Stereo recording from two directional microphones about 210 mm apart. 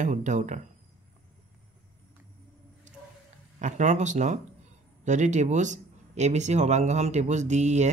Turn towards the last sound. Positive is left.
turn(degrees=-35)  # may be behind; listen again after turning